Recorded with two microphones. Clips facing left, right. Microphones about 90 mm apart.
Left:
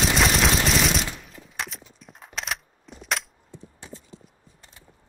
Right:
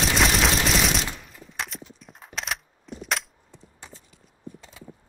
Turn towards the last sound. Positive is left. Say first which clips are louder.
# left 10 dB
turn(degrees=30)  # may be behind; listen again after turning